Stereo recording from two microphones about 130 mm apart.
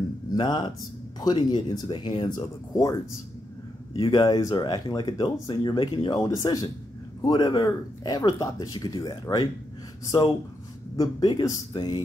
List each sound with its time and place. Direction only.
0.3 s speech: 35° left (ahead or behind)
3.9 s speech: 35° left (ahead or behind)
11.0 s speech: 35° left (ahead or behind)